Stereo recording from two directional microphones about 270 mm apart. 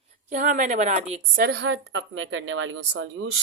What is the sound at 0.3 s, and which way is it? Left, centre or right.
A woman's voice, right.